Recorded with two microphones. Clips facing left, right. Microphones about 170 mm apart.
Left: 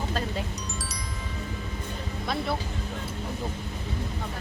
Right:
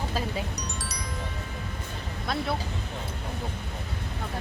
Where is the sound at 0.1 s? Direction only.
10° right (ahead or behind).